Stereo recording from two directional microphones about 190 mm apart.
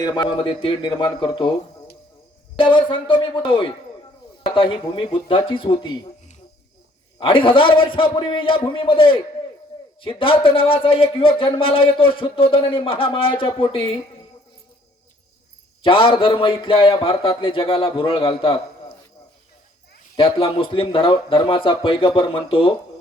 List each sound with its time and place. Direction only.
0.0 s a man's voice: 20° left (ahead or behind)
2.6 s a man's voice: 25° left (ahead or behind)
7.2 s a man's voice: 25° left (ahead or behind)
15.8 s a man's voice: 25° left (ahead or behind)
20.1 s a man's voice: 25° left (ahead or behind)